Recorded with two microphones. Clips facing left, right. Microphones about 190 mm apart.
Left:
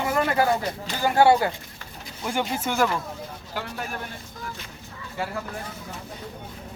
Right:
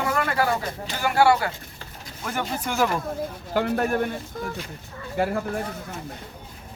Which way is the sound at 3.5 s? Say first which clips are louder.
Right 11 dB; 55° right (ahead or behind).